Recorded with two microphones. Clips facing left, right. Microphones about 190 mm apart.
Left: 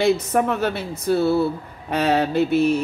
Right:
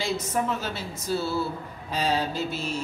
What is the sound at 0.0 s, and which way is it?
Speech, 60° left (ahead or behind).